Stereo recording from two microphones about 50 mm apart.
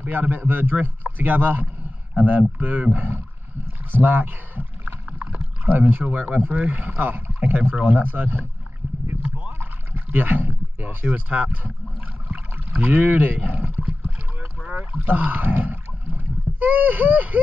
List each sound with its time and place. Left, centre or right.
0.0 s a man's voice: right
5.7 s a man's voice: right
6.9 s a man's voice: right
9.4 s rowboat: right
11.1 s a man's voice: right
13.8 s rowboat: right
14.9 s speech: right